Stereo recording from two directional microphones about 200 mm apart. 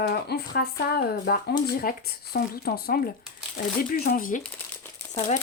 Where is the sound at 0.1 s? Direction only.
55° left (ahead or behind).